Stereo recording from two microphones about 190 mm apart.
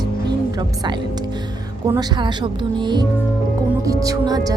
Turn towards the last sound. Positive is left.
turn(degrees=-20)  # may be behind; listen again after turning